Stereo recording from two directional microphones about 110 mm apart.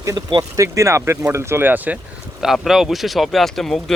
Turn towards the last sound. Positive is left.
turn(degrees=5)  # may be behind; listen again after turning